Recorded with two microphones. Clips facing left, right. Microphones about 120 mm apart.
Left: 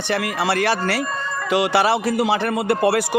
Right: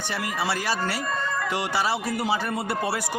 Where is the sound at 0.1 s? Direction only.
70° left (ahead or behind).